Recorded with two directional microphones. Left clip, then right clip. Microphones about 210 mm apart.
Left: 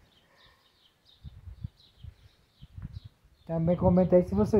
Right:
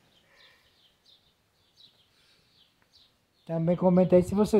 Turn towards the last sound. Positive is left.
turn(degrees=-15)  # may be behind; listen again after turning